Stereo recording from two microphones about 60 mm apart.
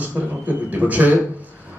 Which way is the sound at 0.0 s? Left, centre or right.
Right.